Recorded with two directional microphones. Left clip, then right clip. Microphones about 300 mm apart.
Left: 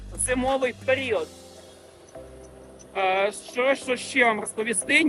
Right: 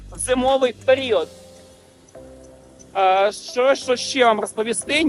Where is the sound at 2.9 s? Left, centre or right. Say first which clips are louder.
Right 7 dB; centre.